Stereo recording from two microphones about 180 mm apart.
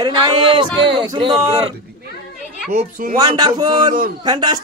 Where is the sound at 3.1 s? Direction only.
20° right (ahead or behind).